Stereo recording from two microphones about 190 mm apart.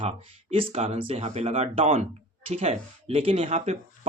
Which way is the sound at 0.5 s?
30° right (ahead or behind).